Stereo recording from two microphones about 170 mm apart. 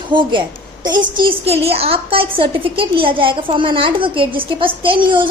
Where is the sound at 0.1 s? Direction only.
30° right (ahead or behind).